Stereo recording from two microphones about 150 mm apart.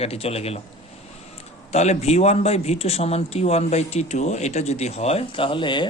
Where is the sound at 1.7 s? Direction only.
50° left (ahead or behind).